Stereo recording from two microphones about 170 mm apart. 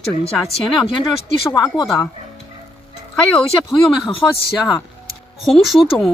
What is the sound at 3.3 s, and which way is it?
Speech, centre (ahead or behind).